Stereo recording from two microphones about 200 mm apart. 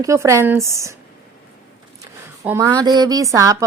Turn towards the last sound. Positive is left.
turn(degrees=-15)  # may be behind; listen again after turning